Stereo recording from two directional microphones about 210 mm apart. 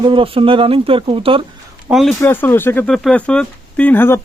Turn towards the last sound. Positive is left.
turn(degrees=10)  # may be behind; listen again after turning